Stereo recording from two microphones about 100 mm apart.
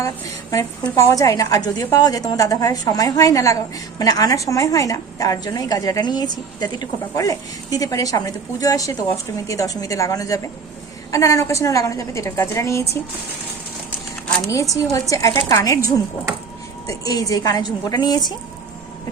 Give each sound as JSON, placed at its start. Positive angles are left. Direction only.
{"t": 0.9, "sound": "a woman's voice", "side_deg": 30}
{"t": 14.5, "sound": "a woman's voice", "side_deg": 35}